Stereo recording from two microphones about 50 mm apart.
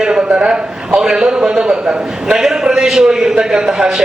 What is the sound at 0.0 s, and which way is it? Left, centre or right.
A man's voice, centre.